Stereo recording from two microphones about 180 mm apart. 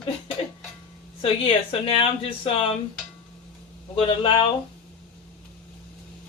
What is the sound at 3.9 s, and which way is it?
Speech, 30° left (ahead or behind).